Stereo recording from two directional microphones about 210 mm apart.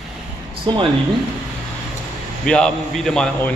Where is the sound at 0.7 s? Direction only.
20° right (ahead or behind).